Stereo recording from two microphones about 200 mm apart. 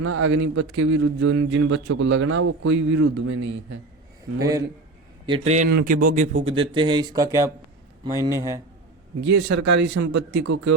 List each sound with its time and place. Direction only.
0.1 s a man's voice: 80° right
4.4 s a man's voice: 15° right (ahead or behind)
5.2 s a man's voice: 30° right (ahead or behind)
9.4 s speech: 60° right (ahead or behind)